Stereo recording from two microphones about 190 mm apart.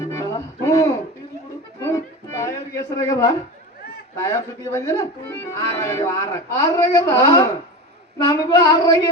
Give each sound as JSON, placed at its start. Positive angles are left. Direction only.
{"t": 0.0, "sound": "music", "side_deg": 15}
{"t": 4.2, "sound": "a woman's voice", "side_deg": 15}